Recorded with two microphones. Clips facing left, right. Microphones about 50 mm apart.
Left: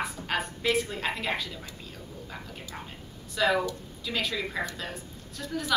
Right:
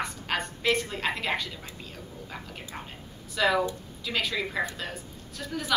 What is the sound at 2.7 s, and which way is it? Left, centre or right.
Speech, right.